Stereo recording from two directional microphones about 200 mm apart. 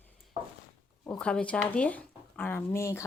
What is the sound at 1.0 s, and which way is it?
Speech, 5° left (ahead or behind).